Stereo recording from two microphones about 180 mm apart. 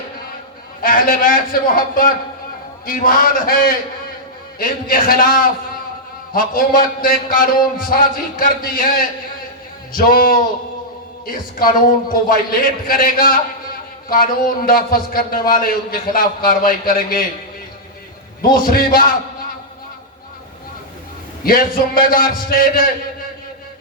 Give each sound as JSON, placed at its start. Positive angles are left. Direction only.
{"t": 0.8, "sound": "a man's voice", "side_deg": 50}
{"t": 18.5, "sound": "a man's voice", "side_deg": 50}
{"t": 21.4, "sound": "a man's voice", "side_deg": 50}